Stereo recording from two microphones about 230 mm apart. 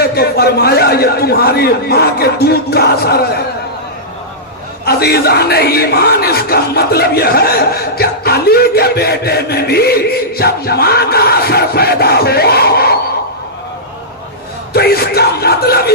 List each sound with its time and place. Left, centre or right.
0.0 s speech: left
4.9 s speech: left
14.7 s yell: left